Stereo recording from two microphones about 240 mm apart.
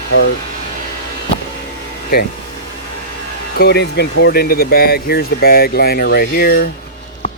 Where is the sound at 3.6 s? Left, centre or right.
Left.